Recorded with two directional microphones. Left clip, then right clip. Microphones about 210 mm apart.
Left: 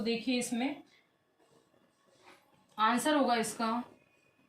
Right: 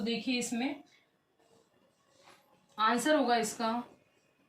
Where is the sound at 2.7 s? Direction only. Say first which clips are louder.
Even; 20° left (ahead or behind).